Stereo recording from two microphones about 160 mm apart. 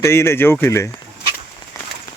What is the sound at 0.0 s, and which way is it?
Speech, 15° left (ahead or behind).